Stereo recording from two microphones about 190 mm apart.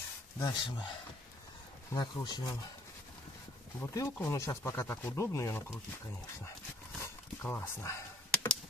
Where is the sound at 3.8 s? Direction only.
15° left (ahead or behind).